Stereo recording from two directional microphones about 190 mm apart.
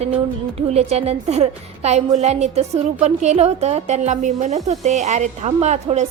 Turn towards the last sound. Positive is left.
turn(degrees=-35)  # may be behind; listen again after turning